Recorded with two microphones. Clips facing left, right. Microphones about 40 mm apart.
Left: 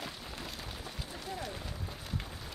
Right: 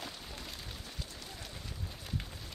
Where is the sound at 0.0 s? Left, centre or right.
Centre.